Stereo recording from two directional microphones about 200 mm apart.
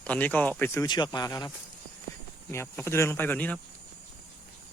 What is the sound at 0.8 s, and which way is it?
Speech, 20° left (ahead or behind).